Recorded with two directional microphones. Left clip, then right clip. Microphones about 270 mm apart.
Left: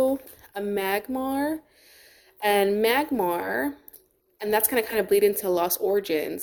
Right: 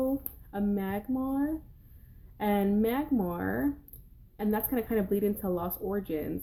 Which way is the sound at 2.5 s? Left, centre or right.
Left.